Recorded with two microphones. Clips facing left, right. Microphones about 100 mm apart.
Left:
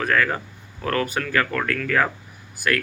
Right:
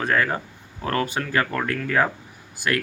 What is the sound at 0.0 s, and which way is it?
Speech, 25° right (ahead or behind).